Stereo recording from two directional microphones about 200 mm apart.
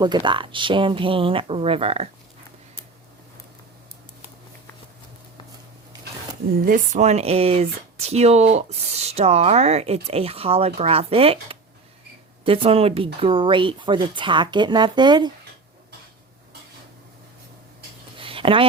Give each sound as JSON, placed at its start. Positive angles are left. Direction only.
{"t": 0.0, "sound": "speech", "side_deg": -20}
{"t": 6.5, "sound": "speech", "side_deg": -45}
{"t": 18.2, "sound": "a sound", "side_deg": -25}